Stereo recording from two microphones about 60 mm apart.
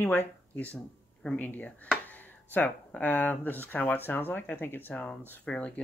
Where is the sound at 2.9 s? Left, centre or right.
Left.